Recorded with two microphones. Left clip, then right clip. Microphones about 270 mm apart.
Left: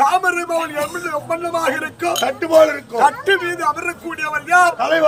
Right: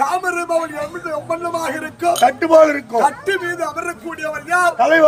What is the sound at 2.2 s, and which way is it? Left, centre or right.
Speech, centre.